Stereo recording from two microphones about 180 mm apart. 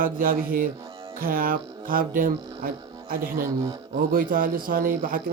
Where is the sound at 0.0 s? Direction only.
50° right (ahead or behind).